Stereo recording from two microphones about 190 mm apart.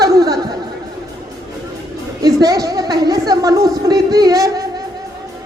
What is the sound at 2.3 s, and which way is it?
A man's voice, 20° right (ahead or behind).